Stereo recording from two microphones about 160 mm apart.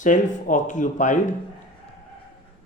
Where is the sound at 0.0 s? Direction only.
50° left (ahead or behind).